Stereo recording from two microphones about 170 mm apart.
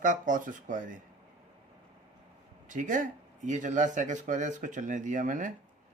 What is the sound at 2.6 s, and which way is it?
Speech, 50° right (ahead or behind).